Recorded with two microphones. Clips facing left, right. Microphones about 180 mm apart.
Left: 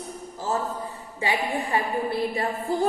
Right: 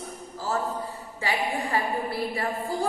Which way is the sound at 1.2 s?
20° left (ahead or behind).